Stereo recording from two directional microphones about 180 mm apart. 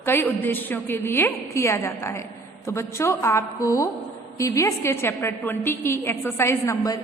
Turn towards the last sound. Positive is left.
turn(degrees=20)  # may be behind; listen again after turning